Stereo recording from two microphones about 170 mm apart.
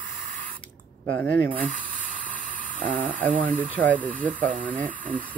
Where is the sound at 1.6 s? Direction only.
55° right (ahead or behind).